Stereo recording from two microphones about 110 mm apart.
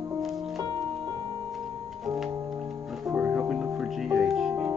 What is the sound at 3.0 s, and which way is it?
Music, 10° right (ahead or behind).